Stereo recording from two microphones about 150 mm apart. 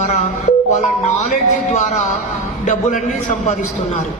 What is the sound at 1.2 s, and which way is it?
A man's voice, 50° left (ahead or behind).